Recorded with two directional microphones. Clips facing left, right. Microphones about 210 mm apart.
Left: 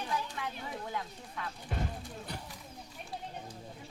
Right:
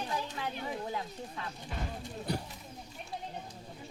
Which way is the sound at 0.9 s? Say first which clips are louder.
Right 2 dB; 25° right (ahead or behind).